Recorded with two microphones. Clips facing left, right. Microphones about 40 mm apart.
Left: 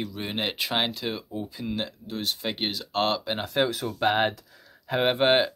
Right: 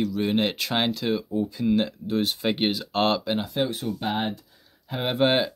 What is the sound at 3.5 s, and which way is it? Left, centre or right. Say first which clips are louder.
Speech: left 1 dB; left.